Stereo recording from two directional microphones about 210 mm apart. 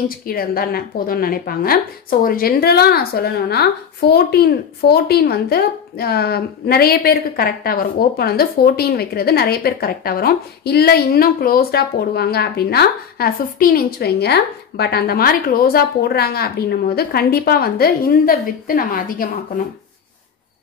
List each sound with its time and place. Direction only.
0.3 s a woman's voice: 45° left (ahead or behind)